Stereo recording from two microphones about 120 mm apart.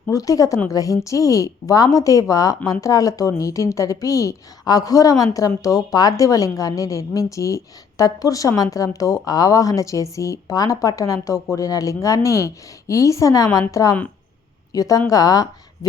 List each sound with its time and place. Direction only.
0.1 s a woman's voice: 30° left (ahead or behind)